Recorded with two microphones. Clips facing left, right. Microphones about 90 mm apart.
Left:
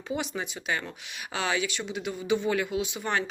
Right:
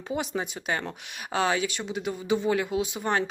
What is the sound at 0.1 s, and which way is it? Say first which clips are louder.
Speech: right 2 dB; 40° right (ahead or behind).